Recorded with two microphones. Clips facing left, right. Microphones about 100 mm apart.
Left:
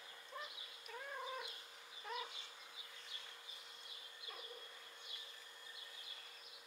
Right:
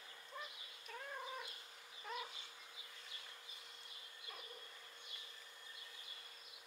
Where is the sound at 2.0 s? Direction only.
Centre (ahead or behind).